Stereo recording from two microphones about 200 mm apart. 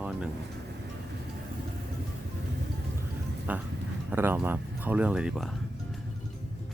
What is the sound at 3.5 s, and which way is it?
Speech, 10° right (ahead or behind).